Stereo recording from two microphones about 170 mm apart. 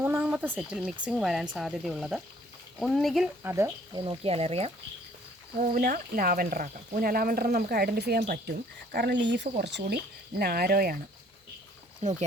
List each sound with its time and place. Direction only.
0.0 s speech: 10° right (ahead or behind)
3.4 s speech: 15° right (ahead or behind)
3.9 s speech: 25° right (ahead or behind)
5.5 s speech: 55° right (ahead or behind)
12.0 s speech: 45° right (ahead or behind)